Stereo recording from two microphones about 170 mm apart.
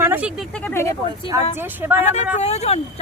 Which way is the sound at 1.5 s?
10° right (ahead or behind).